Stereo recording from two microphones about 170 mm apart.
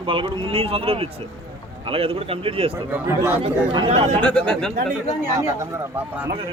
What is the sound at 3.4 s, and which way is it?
Speech, 35° right (ahead or behind).